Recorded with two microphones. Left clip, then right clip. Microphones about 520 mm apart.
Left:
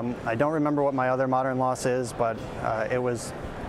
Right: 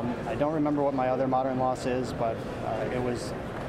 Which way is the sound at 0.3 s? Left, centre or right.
Left.